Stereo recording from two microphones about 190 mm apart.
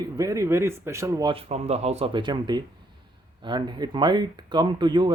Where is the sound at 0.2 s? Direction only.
15° right (ahead or behind).